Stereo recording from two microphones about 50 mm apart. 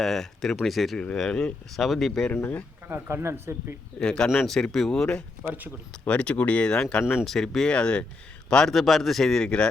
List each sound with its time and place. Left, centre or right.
0.0 s speech: centre
1.1 s speech: centre
1.7 s speech: centre
3.1 s speech: right
4.0 s speech: centre
5.5 s speech: right
5.9 s speech: left
7.0 s speech: centre
7.3 s speech: centre
7.7 s a man's voice: left
8.7 s speech: centre